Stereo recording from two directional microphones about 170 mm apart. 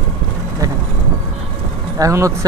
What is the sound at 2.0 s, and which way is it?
Speech, 20° right (ahead or behind).